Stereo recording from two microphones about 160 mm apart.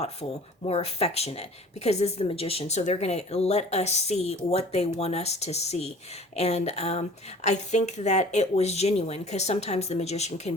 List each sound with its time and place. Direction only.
0.0 s speech: 40° left (ahead or behind)